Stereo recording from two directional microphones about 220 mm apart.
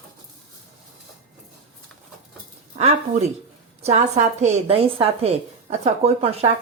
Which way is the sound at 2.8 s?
30° right (ahead or behind).